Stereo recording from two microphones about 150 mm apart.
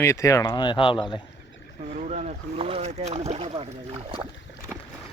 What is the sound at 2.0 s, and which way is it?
Speech, 50° right (ahead or behind).